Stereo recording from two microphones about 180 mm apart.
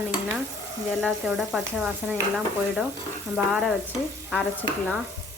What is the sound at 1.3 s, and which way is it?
Speech, centre (ahead or behind).